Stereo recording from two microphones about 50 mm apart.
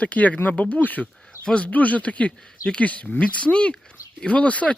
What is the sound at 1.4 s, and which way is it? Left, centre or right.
Speech, left.